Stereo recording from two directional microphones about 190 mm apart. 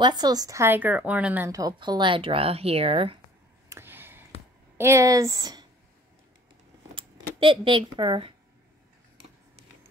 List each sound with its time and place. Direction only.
0.0 s speech: 20° right (ahead or behind)
3.6 s a sound: 15° right (ahead or behind)
4.7 s speech: 15° right (ahead or behind)
7.0 s speech: 25° right (ahead or behind)